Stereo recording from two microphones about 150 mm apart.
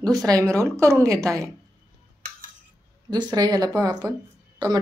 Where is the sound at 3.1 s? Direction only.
25° right (ahead or behind).